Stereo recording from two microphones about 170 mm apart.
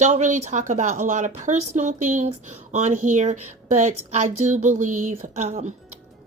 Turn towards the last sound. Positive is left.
turn(degrees=-45)  # may be behind; listen again after turning